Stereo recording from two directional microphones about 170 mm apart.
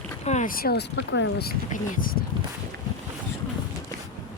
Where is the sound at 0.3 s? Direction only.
50° left (ahead or behind).